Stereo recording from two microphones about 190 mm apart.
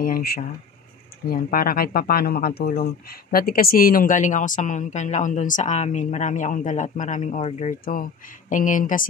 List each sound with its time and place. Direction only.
0.0 s speech: 50° left (ahead or behind)